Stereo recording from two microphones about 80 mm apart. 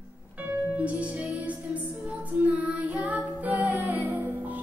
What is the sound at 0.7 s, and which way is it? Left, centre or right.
Music, centre.